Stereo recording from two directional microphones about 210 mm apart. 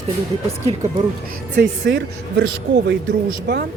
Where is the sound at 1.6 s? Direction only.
55° right (ahead or behind).